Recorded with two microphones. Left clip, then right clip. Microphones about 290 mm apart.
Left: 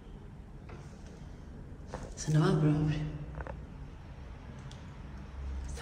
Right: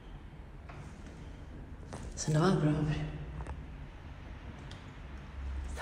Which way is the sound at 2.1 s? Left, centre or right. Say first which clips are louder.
Right 1 dB; centre.